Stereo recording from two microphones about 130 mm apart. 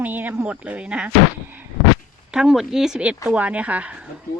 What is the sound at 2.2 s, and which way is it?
Speech, 5° right (ahead or behind).